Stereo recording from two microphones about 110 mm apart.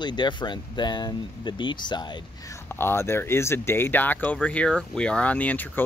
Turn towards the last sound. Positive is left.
turn(degrees=15)  # may be behind; listen again after turning